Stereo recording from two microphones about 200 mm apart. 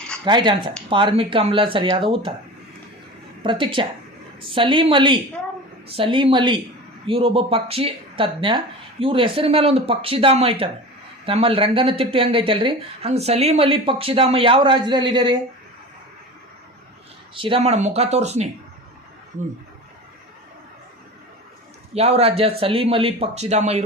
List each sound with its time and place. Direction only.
0.3 s speech: 20° right (ahead or behind)
3.4 s speech: 25° right (ahead or behind)
17.3 s speech: 25° right (ahead or behind)
21.9 s speech: 30° right (ahead or behind)